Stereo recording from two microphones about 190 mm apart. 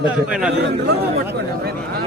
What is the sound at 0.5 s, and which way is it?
Speech, 60° right (ahead or behind).